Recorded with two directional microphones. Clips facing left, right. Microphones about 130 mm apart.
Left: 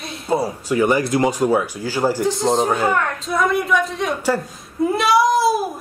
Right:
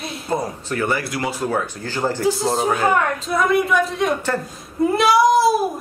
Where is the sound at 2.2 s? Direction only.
5° right (ahead or behind).